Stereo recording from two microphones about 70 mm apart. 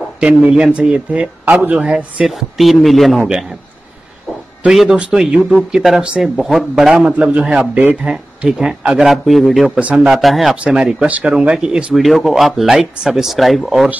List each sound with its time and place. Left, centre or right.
0.2 s a man's voice: centre
1.4 s a man's voice: right
2.2 s speech: centre
4.6 s a man's voice: centre
9.1 s speech: centre
9.8 s a man's voice: centre
10.1 s speech: centre
10.6 s a man's voice: centre
11.3 s a man's voice: centre
12.0 s speech: centre